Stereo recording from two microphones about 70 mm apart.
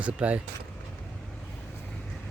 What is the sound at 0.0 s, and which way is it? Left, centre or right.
Speech, centre.